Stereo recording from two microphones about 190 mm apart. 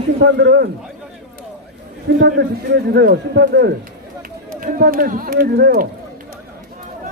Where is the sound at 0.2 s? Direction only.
60° right (ahead or behind).